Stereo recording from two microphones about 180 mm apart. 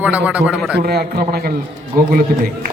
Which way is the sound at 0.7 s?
60° right (ahead or behind).